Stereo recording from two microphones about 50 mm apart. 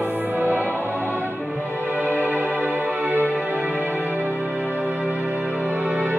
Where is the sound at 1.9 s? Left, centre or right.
Right.